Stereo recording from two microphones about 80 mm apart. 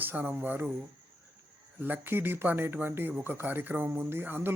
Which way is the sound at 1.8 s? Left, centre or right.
Right.